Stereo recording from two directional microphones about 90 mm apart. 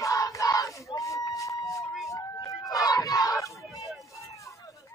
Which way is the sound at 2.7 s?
45° left (ahead or behind).